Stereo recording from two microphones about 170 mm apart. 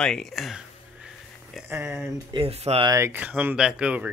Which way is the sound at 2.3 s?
35° right (ahead or behind).